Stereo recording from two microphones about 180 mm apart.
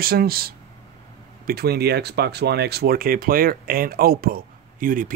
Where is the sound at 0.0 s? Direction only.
55° right (ahead or behind).